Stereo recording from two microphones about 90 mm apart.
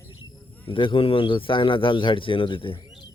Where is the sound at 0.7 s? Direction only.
75° left (ahead or behind).